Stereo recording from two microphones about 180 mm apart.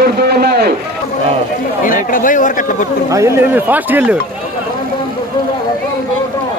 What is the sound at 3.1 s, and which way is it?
Speech, 15° right (ahead or behind).